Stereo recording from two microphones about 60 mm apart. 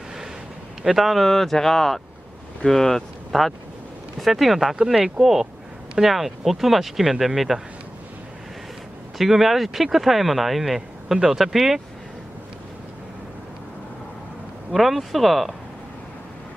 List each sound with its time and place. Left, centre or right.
0.9 s speech: centre
9.2 s speech: centre
14.7 s speech: centre